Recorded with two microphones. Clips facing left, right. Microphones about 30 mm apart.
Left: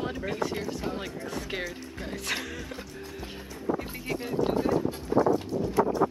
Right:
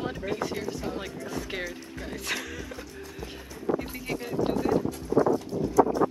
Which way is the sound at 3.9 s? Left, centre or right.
Centre.